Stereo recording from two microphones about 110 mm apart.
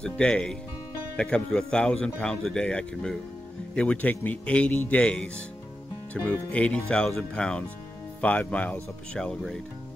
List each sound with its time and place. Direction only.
0.0 s speech: 10° left (ahead or behind)